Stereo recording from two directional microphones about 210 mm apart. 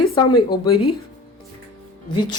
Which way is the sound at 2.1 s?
20° left (ahead or behind).